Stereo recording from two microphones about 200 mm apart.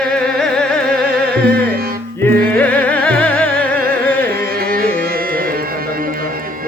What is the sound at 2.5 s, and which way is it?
Music, 5° left (ahead or behind).